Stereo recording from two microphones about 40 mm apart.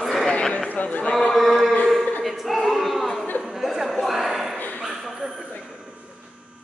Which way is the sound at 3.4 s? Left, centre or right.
Centre.